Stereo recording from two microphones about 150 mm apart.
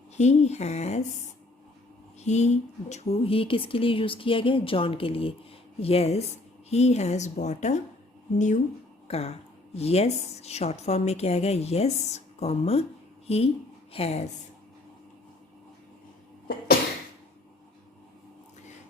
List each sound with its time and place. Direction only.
0.2 s a woman's voice: 50° left (ahead or behind)
2.2 s a woman's voice: 50° left (ahead or behind)
9.0 s a woman's voice: 45° left (ahead or behind)